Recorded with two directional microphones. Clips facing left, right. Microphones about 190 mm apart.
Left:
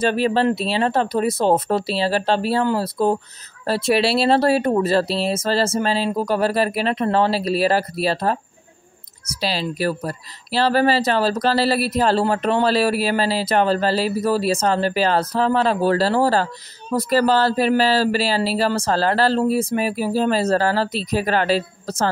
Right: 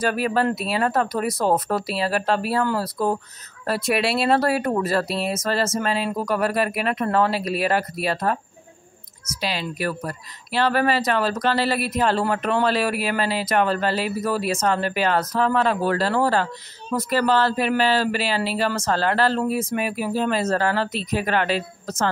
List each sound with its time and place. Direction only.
0.0 s a woman's voice: 25° left (ahead or behind)